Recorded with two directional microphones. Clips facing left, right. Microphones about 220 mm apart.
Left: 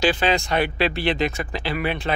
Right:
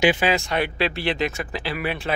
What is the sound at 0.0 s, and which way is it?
Speech, 15° right (ahead or behind).